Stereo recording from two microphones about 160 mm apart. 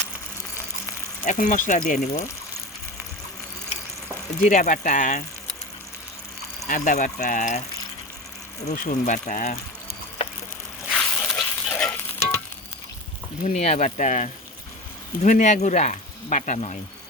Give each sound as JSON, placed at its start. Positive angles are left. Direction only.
{"t": 1.2, "sound": "speech", "side_deg": 55}
{"t": 4.4, "sound": "speech", "side_deg": 55}
{"t": 6.7, "sound": "speech", "side_deg": 55}
{"t": 8.7, "sound": "speech", "side_deg": 55}
{"t": 10.9, "sound": "a sound", "side_deg": 5}
{"t": 13.4, "sound": "speech", "side_deg": 50}